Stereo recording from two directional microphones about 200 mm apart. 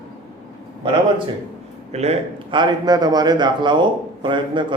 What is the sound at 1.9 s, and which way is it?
A man's voice, 35° right (ahead or behind).